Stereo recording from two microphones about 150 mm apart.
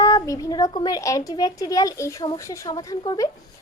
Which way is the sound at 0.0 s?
25° left (ahead or behind).